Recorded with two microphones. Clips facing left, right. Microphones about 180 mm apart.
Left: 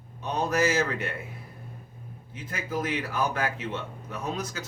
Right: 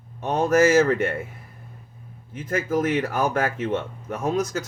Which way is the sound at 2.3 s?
45° right (ahead or behind).